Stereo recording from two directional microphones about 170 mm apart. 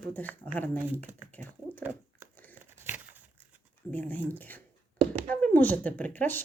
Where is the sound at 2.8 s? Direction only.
10° right (ahead or behind).